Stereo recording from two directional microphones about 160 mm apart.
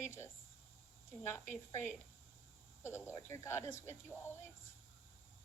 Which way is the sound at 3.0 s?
15° left (ahead or behind).